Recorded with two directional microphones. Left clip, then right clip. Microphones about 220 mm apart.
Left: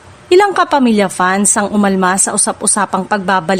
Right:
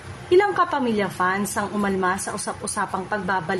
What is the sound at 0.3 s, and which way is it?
A woman's voice, 50° left (ahead or behind).